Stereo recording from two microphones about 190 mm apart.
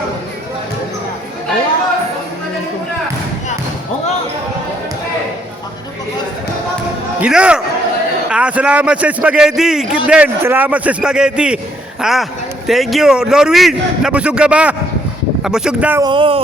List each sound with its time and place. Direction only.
7.2 s a man's voice: 5° right (ahead or behind)
16.0 s speech: 25° right (ahead or behind)